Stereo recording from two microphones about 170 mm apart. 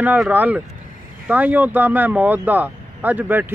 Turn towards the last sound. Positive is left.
turn(degrees=-10)  # may be behind; listen again after turning